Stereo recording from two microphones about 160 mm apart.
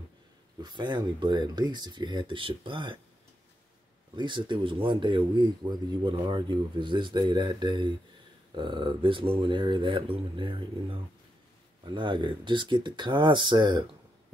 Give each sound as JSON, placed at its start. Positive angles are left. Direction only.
{"t": 0.6, "sound": "speech", "side_deg": -25}
{"t": 4.1, "sound": "speech", "side_deg": -30}